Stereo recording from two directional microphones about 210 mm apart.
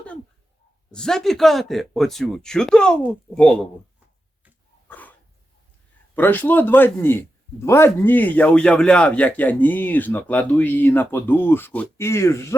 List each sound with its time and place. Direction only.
0.9 s speech: 5° left (ahead or behind)
4.9 s dog: 5° left (ahead or behind)
6.1 s a man's voice: 10° left (ahead or behind)